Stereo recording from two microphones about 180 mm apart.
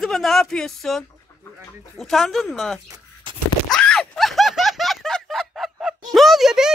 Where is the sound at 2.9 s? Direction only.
25° right (ahead or behind).